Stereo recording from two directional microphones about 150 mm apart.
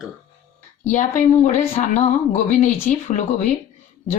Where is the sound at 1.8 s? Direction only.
50° left (ahead or behind).